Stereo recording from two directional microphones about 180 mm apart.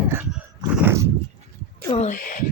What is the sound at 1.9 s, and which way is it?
Speech, 40° left (ahead or behind).